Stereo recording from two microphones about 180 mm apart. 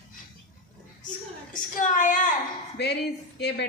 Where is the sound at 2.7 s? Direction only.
70° left (ahead or behind).